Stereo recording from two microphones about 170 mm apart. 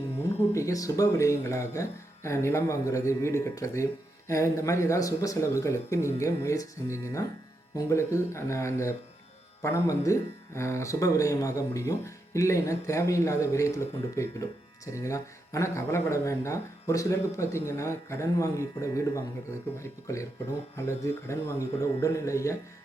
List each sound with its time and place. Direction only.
0.3 s speech: 20° left (ahead or behind)